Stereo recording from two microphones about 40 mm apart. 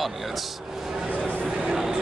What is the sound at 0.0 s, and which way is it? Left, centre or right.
Speech, centre.